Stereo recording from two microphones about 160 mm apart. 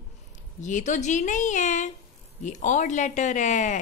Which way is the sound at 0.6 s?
50° left (ahead or behind).